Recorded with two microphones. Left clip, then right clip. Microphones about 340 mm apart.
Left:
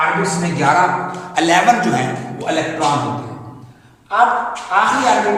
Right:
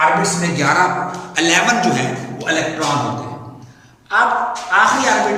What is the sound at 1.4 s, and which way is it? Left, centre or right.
Speech, centre.